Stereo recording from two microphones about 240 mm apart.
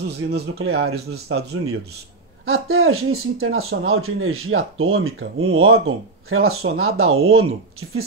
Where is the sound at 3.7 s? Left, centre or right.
Right.